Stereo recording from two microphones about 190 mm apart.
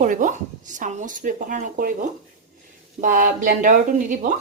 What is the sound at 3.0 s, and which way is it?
A woman's voice, 45° right (ahead or behind).